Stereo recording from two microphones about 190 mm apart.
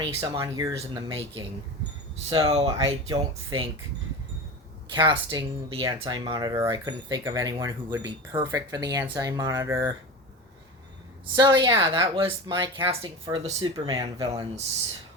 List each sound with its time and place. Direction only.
0.0 s speech: 25° right (ahead or behind)
4.9 s speech: 25° right (ahead or behind)
11.3 s speech: 20° right (ahead or behind)